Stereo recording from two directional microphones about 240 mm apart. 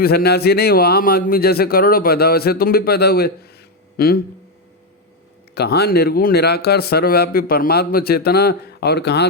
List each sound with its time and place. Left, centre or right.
0.0 s speech: left
5.5 s speech: left